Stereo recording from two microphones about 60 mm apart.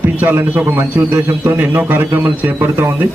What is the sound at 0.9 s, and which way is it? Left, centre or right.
A man's voice, right.